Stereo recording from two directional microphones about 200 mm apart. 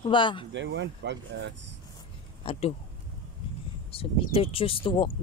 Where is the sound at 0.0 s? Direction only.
25° left (ahead or behind).